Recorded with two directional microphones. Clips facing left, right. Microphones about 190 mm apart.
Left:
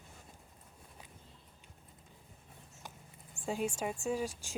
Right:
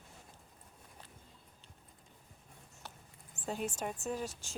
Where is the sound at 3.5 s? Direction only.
10° left (ahead or behind).